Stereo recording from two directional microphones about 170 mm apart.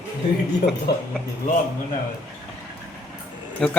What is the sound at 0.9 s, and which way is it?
Speech, 70° left (ahead or behind).